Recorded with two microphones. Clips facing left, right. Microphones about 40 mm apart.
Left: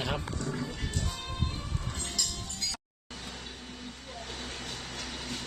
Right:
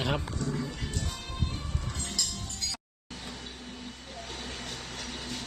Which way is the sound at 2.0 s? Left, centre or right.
Left.